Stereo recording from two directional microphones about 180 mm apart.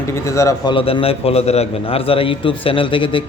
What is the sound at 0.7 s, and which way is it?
A man's voice, 30° left (ahead or behind).